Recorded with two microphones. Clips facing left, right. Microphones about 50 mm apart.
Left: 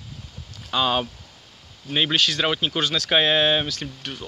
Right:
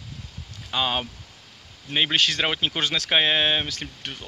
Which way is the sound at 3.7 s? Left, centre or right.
Right.